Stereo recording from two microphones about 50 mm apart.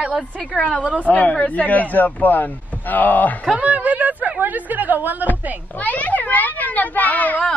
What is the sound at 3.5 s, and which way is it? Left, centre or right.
Speech, right.